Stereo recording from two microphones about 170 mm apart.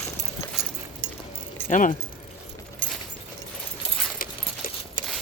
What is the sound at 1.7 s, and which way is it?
Speech, 45° left (ahead or behind).